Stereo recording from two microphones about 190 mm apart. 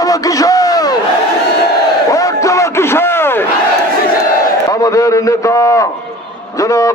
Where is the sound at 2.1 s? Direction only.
15° left (ahead or behind).